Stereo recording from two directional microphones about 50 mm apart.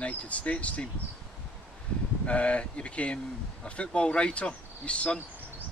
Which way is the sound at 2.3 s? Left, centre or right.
Left.